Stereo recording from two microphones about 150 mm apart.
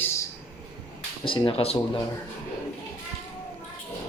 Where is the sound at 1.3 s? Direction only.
35° left (ahead or behind).